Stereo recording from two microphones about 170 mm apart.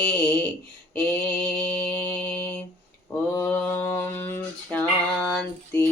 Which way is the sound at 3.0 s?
10° left (ahead or behind).